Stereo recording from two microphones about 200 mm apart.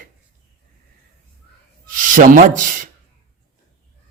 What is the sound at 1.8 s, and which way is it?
Speech, 40° right (ahead or behind).